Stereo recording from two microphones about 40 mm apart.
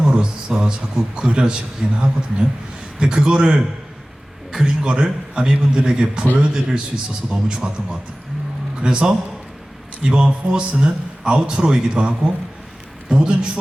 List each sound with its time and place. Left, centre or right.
0.0 s a man's voice: right
4.6 s a man's voice: right